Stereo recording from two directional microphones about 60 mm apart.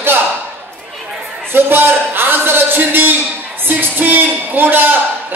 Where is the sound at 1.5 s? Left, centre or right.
Right.